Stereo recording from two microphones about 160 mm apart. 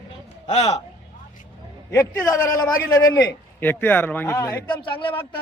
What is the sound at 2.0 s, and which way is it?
A man's voice, 20° left (ahead or behind).